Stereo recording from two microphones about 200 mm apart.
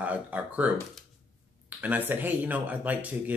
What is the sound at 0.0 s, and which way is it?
Speech, 5° right (ahead or behind).